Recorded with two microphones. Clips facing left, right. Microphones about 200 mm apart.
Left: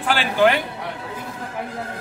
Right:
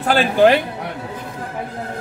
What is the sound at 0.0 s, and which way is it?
Speech, 40° right (ahead or behind).